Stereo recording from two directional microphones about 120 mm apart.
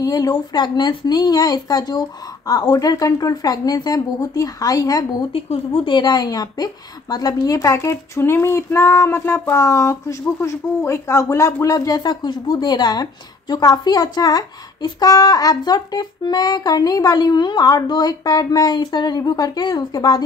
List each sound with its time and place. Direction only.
0.0 s speech: 30° left (ahead or behind)
5.3 s a woman's voice: 50° left (ahead or behind); by 20.2 s 30° left (ahead or behind)